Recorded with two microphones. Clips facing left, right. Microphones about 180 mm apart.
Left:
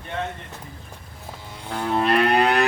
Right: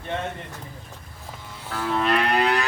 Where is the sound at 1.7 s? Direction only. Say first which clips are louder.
Left 2 dB; 30° left (ahead or behind).